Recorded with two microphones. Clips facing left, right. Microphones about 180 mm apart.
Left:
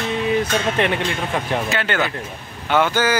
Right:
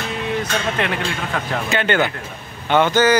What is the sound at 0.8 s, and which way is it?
Speech, 20° left (ahead or behind).